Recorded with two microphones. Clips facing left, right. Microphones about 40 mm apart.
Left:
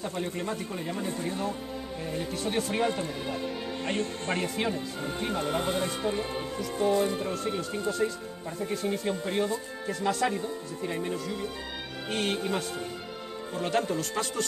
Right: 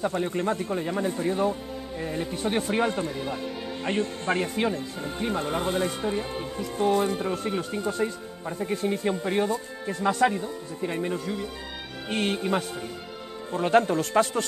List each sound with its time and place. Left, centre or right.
0.1 s a man's voice: right
2.8 s speech: centre
3.8 s speech: centre
6.6 s a man's voice: right
8.8 s speech: right
9.3 s speech: right
9.8 s a man's voice: right
13.7 s speech: right